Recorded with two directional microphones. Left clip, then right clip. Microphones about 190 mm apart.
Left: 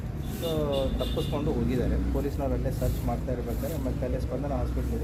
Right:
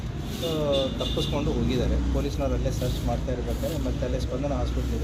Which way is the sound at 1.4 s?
Centre (ahead or behind).